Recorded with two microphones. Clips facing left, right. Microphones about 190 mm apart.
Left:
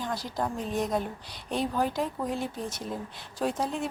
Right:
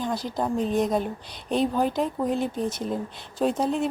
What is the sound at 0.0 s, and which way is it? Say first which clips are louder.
Speech: right 4 dB; 20° right (ahead or behind).